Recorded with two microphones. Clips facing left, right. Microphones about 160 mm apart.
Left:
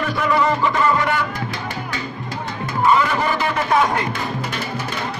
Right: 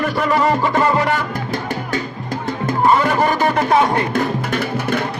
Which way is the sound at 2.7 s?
40° right (ahead or behind).